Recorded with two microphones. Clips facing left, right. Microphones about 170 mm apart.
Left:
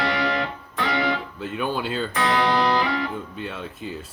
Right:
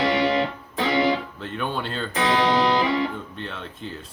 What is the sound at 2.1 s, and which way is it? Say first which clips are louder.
Music: right 2 dB; 20° right (ahead or behind).